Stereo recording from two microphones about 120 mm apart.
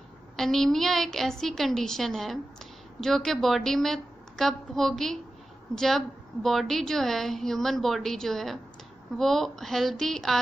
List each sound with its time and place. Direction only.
0.4 s a woman's voice: 5° left (ahead or behind)